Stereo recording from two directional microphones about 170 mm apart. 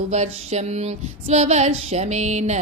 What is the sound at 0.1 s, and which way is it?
Female singing, 40° right (ahead or behind).